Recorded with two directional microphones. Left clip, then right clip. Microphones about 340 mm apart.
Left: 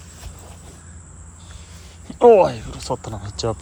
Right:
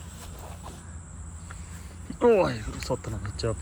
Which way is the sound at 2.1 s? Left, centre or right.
Centre.